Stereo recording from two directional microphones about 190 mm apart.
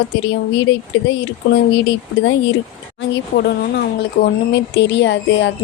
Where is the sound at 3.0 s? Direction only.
60° left (ahead or behind).